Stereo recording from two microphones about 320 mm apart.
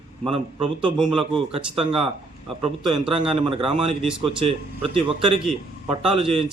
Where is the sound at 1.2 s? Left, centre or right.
Centre.